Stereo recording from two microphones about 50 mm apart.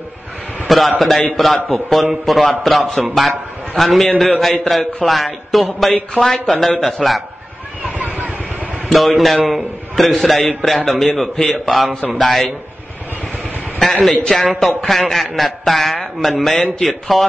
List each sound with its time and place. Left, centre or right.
0.7 s a man's voice: centre
8.9 s a man's voice: centre
13.7 s a man's voice: centre